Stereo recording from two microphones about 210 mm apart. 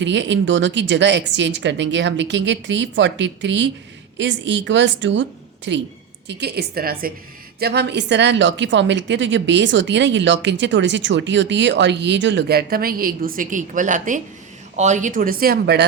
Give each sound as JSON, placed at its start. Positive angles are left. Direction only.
{"t": 0.0, "sound": "a woman's voice", "side_deg": -60}